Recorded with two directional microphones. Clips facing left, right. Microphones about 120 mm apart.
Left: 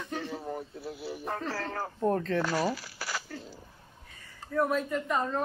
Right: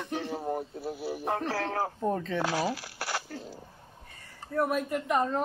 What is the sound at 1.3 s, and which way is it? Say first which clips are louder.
Speech: right 4 dB; 65° right (ahead or behind).